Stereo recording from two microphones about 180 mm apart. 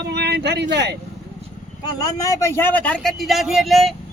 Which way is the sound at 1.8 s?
20° left (ahead or behind).